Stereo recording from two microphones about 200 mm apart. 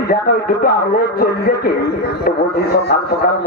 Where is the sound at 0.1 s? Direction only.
45° left (ahead or behind).